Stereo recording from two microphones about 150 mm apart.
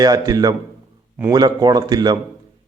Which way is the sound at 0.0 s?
25° right (ahead or behind).